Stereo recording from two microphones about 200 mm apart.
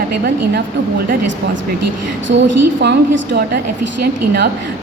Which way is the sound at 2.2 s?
65° right (ahead or behind).